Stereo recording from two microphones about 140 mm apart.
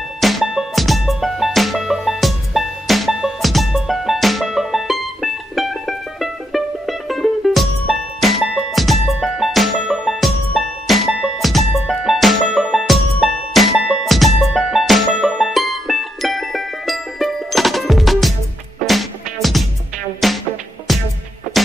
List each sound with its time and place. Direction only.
0.2 s music: centre (ahead or behind)